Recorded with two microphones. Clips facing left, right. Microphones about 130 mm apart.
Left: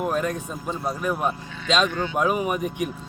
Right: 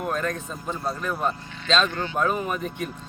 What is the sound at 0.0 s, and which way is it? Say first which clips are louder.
Speech: left 3 dB; 10° left (ahead or behind).